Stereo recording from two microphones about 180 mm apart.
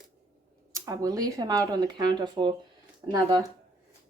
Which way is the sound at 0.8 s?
20° right (ahead or behind).